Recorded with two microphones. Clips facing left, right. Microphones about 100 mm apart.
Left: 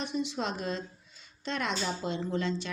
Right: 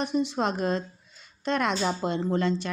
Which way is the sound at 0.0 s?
45° right (ahead or behind).